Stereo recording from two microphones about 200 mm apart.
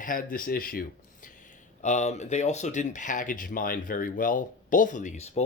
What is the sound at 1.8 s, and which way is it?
Speech, 35° left (ahead or behind).